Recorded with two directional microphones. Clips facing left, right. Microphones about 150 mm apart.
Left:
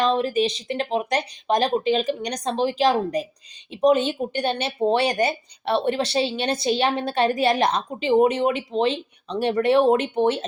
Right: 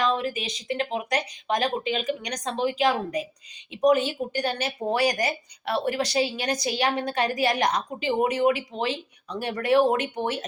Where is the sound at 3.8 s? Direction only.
25° left (ahead or behind).